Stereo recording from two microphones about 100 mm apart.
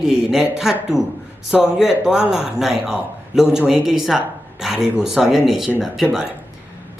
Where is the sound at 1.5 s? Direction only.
5° right (ahead or behind).